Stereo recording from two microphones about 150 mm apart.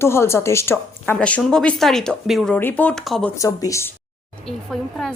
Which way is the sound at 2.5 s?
10° left (ahead or behind).